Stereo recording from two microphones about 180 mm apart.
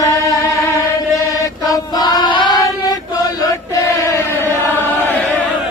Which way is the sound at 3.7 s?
15° left (ahead or behind).